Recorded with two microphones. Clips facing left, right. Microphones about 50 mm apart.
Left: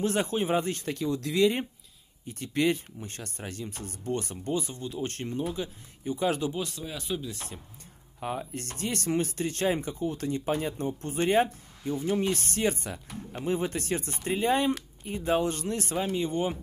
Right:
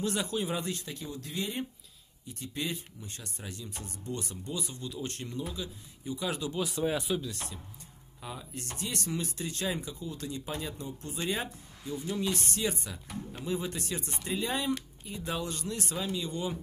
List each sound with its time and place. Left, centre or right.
0.0 s speech: left
0.8 s speech: left
2.2 s speech: left
6.8 s speech: right
7.2 s chopping: left
8.2 s speech: left